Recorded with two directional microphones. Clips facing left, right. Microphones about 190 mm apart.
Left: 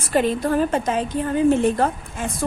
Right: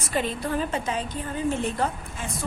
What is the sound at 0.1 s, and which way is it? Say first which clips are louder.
A woman's voice: left 8 dB; 55° left (ahead or behind).